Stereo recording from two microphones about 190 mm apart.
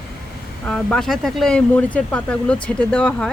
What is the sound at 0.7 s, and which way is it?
Speech, 5° left (ahead or behind).